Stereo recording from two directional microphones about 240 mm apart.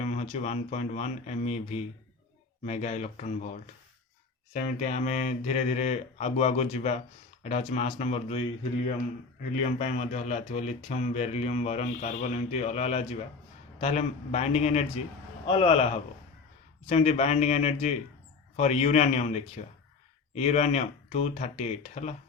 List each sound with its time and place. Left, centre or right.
0.0 s speech: left
4.8 s speech: left